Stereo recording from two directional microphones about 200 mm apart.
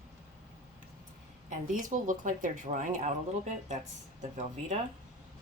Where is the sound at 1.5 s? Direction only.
40° right (ahead or behind).